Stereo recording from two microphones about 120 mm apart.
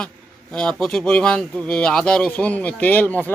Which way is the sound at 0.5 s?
5° left (ahead or behind).